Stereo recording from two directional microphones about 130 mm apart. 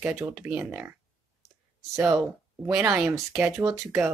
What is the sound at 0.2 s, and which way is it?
Speech, 10° right (ahead or behind).